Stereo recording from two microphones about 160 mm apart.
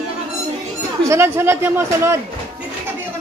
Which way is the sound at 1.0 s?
15° right (ahead or behind).